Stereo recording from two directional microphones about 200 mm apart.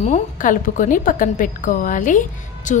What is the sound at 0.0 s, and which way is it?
A woman's voice, 40° left (ahead or behind).